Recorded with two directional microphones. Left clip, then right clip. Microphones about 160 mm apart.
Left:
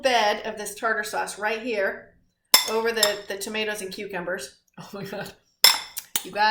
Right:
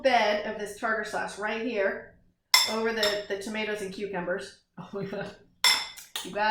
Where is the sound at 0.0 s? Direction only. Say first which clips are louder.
Left 2 dB; 20° left (ahead or behind).